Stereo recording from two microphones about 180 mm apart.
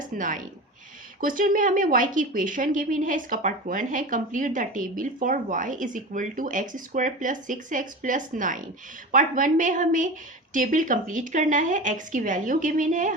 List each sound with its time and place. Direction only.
0.2 s a woman's voice: 45° right (ahead or behind)